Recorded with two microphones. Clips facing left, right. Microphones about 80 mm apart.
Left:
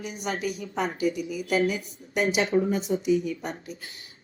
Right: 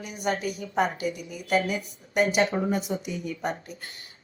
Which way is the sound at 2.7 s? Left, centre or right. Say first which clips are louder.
Left 5 dB; right.